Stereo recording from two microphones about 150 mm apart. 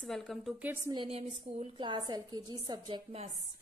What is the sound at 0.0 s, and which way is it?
Speech, 5° left (ahead or behind).